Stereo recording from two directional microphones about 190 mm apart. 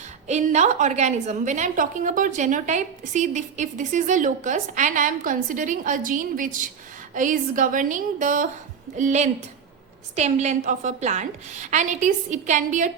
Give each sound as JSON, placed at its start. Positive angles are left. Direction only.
{"t": 0.3, "sound": "a woman's voice", "side_deg": -35}